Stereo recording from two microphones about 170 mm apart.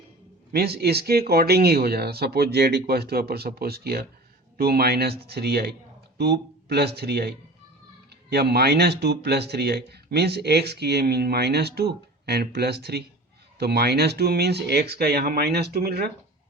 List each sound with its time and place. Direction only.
0.5 s speech: 70° right (ahead or behind)